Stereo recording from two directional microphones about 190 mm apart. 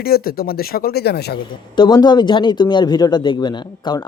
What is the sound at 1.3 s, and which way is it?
Speech, 20° left (ahead or behind).